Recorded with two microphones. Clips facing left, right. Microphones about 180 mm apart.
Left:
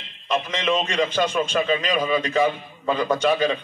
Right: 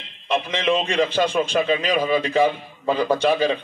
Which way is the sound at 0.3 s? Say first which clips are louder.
Right 2 dB; 10° right (ahead or behind).